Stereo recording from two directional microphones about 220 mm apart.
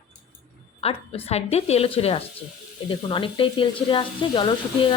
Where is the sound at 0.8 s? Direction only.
25° left (ahead or behind).